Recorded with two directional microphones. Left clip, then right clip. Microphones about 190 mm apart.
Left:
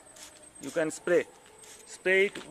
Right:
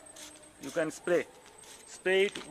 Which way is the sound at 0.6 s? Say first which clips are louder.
Left 2 dB; 45° left (ahead or behind).